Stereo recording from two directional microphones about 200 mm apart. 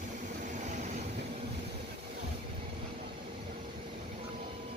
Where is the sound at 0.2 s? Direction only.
40° right (ahead or behind).